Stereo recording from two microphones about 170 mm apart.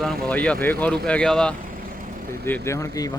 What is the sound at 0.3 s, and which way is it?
Speech, 5° left (ahead or behind).